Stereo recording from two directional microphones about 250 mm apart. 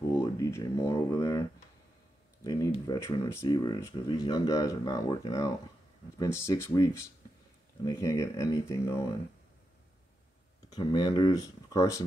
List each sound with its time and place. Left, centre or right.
0.1 s speech: centre
2.4 s speech: centre
10.7 s speech: centre